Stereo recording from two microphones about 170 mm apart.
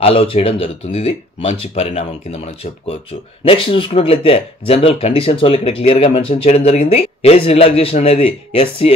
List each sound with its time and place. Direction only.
0.0 s speech: 35° left (ahead or behind)